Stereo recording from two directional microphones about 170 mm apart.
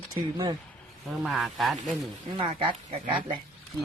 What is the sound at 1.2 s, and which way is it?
Speech, centre (ahead or behind).